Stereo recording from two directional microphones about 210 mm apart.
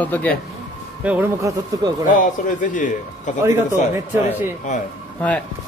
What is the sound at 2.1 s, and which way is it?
Speech, 40° left (ahead or behind).